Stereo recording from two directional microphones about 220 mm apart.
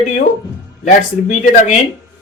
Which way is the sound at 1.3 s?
35° left (ahead or behind).